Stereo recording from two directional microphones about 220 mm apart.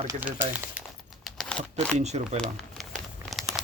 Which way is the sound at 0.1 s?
5° right (ahead or behind).